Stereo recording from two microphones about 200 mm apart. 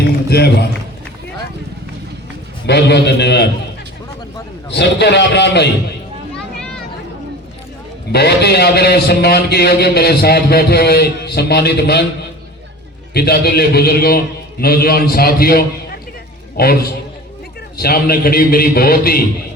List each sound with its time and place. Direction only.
0.3 s a man's voice: 55° left (ahead or behind)
2.6 s a man's voice: 55° left (ahead or behind)
4.7 s a man's voice: 60° left (ahead or behind)
8.1 s a man's voice: 55° left (ahead or behind)
13.1 s a man's voice: 50° left (ahead or behind)